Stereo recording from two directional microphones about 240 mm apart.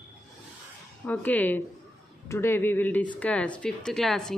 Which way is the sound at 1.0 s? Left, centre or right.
Centre.